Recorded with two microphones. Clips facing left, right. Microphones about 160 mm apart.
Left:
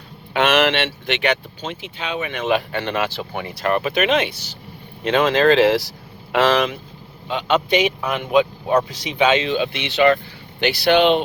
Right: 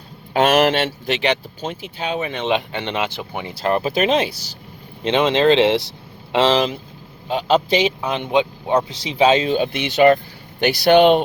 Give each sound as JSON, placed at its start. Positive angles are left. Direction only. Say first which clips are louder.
{"t": 0.3, "sound": "speech", "louder": "right 2 dB", "side_deg": -40}
{"t": 5.0, "sound": "speech", "louder": "even", "side_deg": -20}